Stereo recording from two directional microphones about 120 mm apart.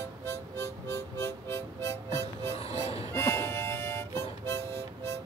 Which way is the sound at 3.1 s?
20° left (ahead or behind).